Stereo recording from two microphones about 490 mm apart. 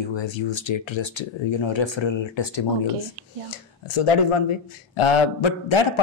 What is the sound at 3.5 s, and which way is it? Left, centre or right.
Speech, left.